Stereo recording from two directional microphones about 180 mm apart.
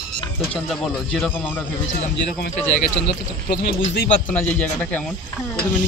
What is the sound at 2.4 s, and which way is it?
Speech, 60° left (ahead or behind).